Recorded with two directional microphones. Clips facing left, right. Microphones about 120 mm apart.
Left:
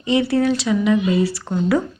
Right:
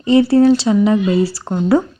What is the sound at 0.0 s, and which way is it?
Speech, 35° right (ahead or behind).